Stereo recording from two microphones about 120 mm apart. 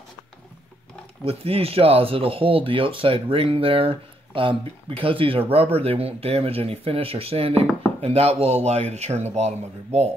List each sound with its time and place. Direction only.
1.2 s speech: 55° right (ahead or behind)